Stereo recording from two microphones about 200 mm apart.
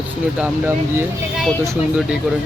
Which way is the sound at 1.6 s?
15° right (ahead or behind).